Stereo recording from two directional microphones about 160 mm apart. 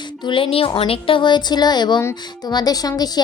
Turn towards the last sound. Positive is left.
turn(degrees=25)  # may be behind; listen again after turning